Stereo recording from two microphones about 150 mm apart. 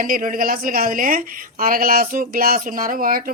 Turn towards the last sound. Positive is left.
turn(degrees=-70)  # may be behind; listen again after turning